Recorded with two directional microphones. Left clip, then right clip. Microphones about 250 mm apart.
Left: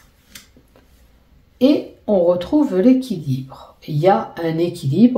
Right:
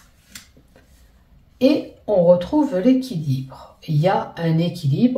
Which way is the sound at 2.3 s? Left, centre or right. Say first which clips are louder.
Right 1 dB; left.